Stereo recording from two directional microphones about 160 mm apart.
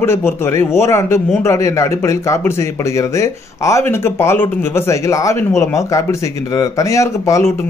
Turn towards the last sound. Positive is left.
turn(degrees=20)  # may be behind; listen again after turning